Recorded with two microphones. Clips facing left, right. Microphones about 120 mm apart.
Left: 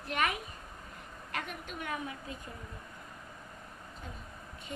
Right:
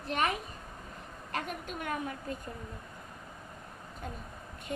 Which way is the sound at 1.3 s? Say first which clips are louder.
Right 3 dB; 40° right (ahead or behind).